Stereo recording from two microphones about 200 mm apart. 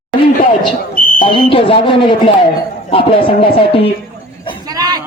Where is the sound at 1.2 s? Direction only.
25° left (ahead or behind).